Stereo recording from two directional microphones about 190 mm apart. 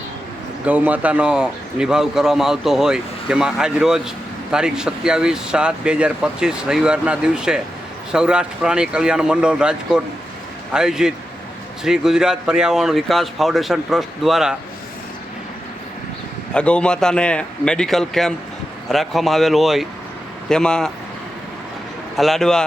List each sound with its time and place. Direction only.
0.6 s speech: 10° right (ahead or behind)
16.6 s speech: 5° left (ahead or behind)
22.1 s speech: centre (ahead or behind)